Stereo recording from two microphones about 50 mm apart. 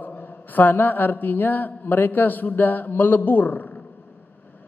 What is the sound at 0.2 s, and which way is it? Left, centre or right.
A man's voice, left.